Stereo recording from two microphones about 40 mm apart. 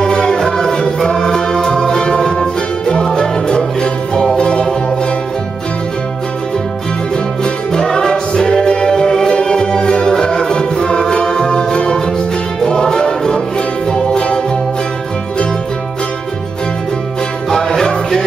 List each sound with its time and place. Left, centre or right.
0.0 s music: centre
7.4 s music: centre
17.5 s music: centre